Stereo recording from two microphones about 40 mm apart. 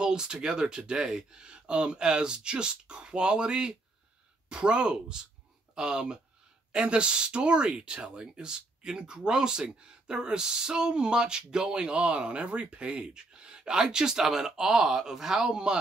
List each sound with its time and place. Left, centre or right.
0.0 s speech: centre